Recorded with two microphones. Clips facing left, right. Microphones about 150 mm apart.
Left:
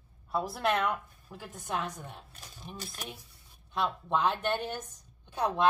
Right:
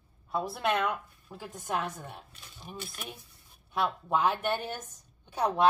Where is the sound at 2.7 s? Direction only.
40° left (ahead or behind).